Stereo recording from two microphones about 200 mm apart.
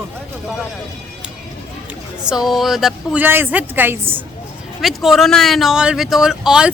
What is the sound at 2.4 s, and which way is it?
A woman's voice, centre (ahead or behind).